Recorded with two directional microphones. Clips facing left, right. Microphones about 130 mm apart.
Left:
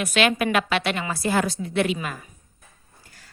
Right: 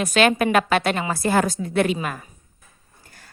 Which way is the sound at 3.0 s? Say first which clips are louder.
Right 4 dB; 50° right (ahead or behind).